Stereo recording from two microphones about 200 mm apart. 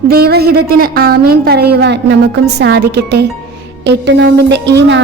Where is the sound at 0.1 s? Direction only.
50° right (ahead or behind).